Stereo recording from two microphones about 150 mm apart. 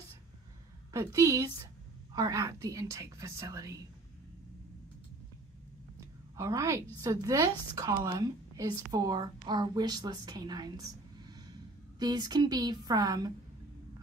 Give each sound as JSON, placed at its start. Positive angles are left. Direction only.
{"t": 0.9, "sound": "a woman's voice", "side_deg": -20}
{"t": 5.9, "sound": "a woman's voice", "side_deg": -20}
{"t": 12.0, "sound": "a woman's voice", "side_deg": -25}